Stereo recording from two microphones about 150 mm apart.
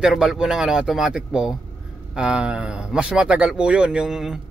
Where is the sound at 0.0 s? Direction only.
Centre (ahead or behind).